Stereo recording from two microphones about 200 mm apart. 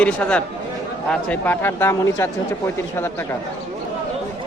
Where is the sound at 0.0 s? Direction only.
5° left (ahead or behind).